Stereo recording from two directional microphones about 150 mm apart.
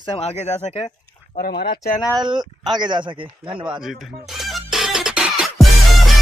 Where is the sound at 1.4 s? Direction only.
90° left.